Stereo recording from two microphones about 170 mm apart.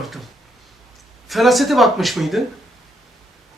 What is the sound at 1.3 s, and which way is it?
Speech, centre (ahead or behind).